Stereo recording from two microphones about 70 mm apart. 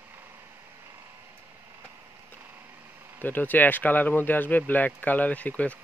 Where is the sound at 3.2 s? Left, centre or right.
Left.